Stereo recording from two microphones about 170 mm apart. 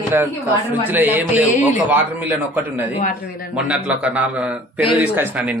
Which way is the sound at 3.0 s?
60° left (ahead or behind).